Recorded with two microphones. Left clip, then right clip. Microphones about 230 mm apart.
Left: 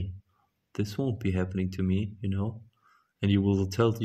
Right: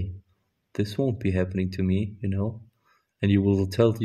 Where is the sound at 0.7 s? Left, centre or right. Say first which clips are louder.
Right 5 dB; centre.